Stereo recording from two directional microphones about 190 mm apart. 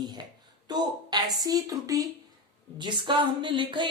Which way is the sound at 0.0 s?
20° right (ahead or behind).